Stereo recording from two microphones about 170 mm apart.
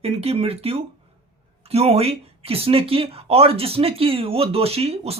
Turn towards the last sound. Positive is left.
turn(degrees=-35)  # may be behind; listen again after turning